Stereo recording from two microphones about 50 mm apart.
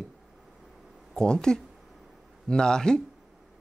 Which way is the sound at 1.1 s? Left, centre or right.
Centre.